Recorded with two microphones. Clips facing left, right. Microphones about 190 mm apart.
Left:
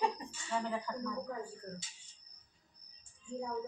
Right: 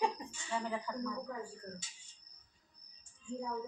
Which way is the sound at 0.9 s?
Centre (ahead or behind).